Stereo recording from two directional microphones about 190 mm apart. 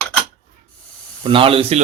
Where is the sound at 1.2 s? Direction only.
30° right (ahead or behind).